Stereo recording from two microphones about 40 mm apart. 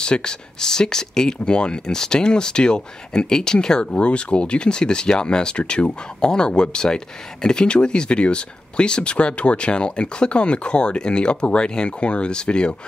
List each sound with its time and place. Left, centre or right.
0.0 s speech: left
4.0 s speech: left